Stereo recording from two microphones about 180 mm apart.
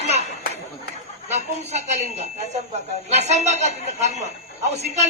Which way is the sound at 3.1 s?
40° right (ahead or behind).